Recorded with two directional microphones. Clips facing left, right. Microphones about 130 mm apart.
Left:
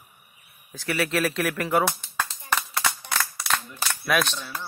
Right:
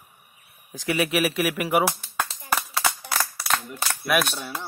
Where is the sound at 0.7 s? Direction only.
15° right (ahead or behind).